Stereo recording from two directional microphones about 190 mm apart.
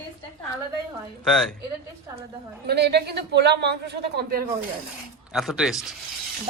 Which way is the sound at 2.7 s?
60° right (ahead or behind).